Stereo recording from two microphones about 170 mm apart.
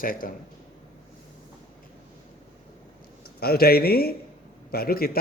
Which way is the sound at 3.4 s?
65° left (ahead or behind).